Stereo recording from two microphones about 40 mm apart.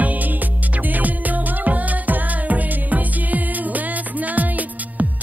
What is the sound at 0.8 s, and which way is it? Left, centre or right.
Music, right.